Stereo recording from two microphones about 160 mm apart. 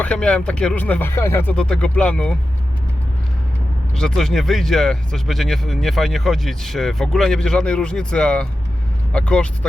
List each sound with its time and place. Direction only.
0.0 s speech: 5° left (ahead or behind)
3.9 s speech: 5° left (ahead or behind)